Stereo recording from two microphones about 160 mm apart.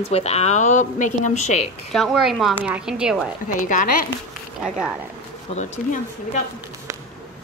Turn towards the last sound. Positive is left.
turn(degrees=50)  # may be behind; listen again after turning